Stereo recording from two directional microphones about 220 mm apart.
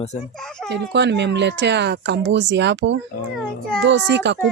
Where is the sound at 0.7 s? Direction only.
50° right (ahead or behind).